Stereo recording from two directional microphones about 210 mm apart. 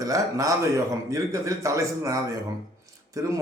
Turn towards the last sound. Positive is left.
turn(degrees=-15)  # may be behind; listen again after turning